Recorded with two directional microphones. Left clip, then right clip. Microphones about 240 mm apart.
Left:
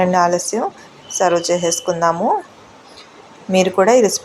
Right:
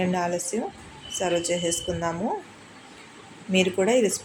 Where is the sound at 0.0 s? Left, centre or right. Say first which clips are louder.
Left 12 dB; centre.